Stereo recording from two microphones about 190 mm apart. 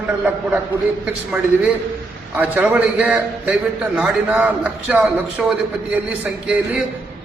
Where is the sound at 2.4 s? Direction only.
10° right (ahead or behind).